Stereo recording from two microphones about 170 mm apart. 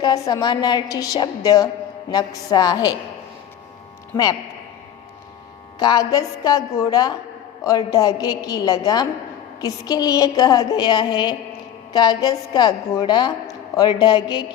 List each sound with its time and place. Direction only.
0.0 s a woman's voice: 25° left (ahead or behind)
5.8 s a woman's voice: 25° left (ahead or behind)